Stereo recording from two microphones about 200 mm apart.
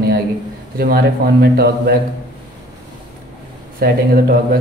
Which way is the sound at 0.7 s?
50° right (ahead or behind).